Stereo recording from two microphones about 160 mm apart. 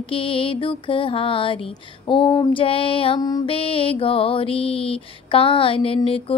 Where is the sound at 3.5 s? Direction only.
35° left (ahead or behind).